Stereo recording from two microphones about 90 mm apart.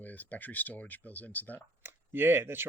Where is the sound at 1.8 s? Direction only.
25° right (ahead or behind).